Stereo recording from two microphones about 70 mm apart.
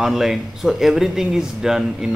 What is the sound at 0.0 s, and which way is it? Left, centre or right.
Speech, centre.